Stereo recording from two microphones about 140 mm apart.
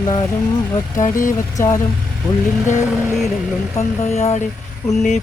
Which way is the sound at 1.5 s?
25° left (ahead or behind).